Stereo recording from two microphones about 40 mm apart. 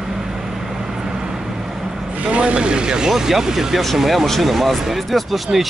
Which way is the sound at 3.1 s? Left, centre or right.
Centre.